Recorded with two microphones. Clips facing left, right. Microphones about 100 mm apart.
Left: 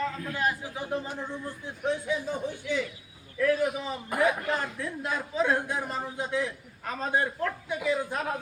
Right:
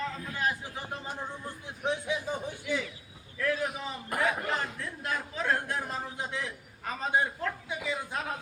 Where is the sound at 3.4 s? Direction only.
Centre (ahead or behind).